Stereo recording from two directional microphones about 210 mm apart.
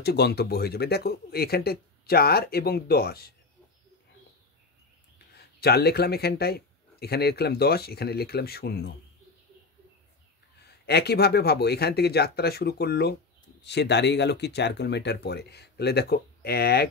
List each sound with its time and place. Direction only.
0.0 s speech: 50° left (ahead or behind)
5.3 s speech: 50° left (ahead or behind)
10.9 s speech: 50° left (ahead or behind)